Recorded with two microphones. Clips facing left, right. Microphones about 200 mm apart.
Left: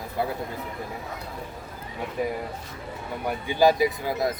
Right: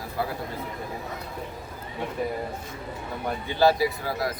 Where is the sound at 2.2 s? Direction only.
15° left (ahead or behind).